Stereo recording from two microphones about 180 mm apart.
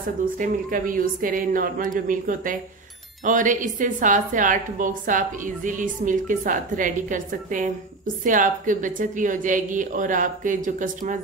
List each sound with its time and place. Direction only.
0.2 s a woman's voice: 50° right (ahead or behind)